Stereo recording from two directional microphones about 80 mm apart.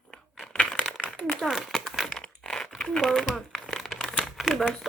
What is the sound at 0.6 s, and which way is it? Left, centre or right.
Crumpling, centre.